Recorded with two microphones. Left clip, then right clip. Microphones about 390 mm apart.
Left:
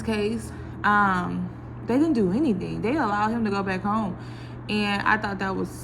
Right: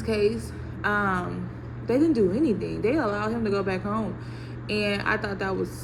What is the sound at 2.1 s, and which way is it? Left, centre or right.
Speech, left.